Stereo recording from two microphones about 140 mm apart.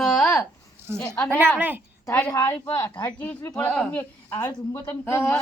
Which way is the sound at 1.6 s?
15° right (ahead or behind).